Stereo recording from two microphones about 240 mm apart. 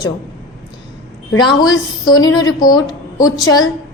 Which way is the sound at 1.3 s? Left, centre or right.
Centre.